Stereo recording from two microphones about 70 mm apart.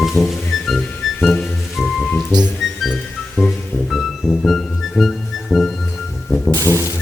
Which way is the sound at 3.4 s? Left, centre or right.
Left.